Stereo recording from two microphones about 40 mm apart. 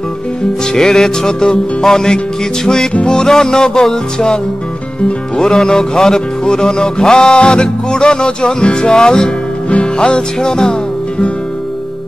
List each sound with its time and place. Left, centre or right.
0.7 s music: centre
5.4 s music: centre
10.4 s music: centre